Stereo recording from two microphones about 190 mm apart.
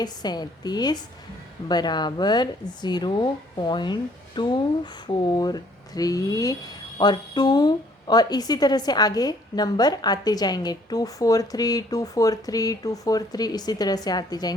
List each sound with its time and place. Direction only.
0.0 s speech: 20° left (ahead or behind)